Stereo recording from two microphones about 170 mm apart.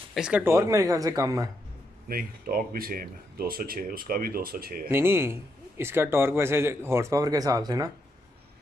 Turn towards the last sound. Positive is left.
turn(degrees=-20)  # may be behind; listen again after turning